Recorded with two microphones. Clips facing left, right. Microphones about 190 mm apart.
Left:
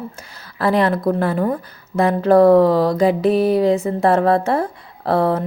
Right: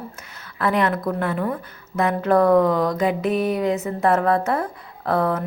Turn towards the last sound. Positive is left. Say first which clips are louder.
# left 4 dB
turn(degrees=30)  # may be behind; listen again after turning